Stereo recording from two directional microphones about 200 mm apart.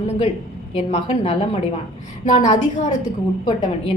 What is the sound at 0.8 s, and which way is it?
A woman's voice, 35° left (ahead or behind).